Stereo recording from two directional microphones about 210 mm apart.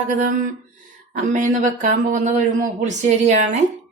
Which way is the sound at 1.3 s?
35° right (ahead or behind).